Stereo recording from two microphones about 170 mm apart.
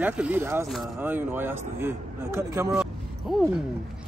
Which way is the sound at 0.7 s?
Centre (ahead or behind).